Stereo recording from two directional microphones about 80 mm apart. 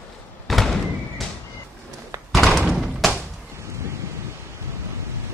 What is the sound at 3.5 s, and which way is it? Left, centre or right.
Wind, right.